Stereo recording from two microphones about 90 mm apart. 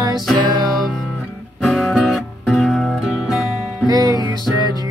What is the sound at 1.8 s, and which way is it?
Music, centre (ahead or behind).